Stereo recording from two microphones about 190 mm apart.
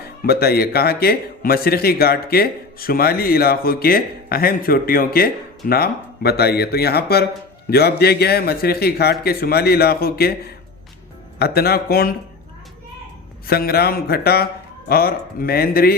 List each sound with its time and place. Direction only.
0.0 s a man's voice: 55° left (ahead or behind)
11.3 s a man's voice: 55° left (ahead or behind)
13.5 s a man's voice: 55° left (ahead or behind)